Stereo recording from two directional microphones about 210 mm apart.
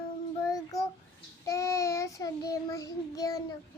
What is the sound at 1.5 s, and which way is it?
Child singing, 15° left (ahead or behind).